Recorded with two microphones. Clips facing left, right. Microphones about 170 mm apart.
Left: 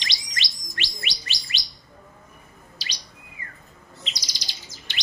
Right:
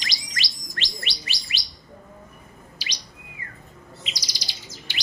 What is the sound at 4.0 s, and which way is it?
Chirp, 10° right (ahead or behind).